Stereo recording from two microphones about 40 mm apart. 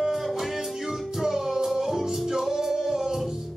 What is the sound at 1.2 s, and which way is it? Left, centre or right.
Music, centre.